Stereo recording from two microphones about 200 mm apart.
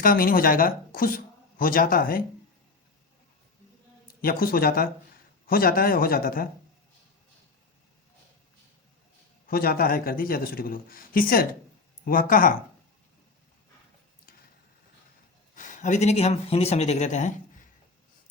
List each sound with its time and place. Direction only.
0.0 s speech: 45° left (ahead or behind)
4.2 s a man's voice: 45° left (ahead or behind)
9.5 s a man's voice: 45° left (ahead or behind)
15.5 s speech: 40° left (ahead or behind)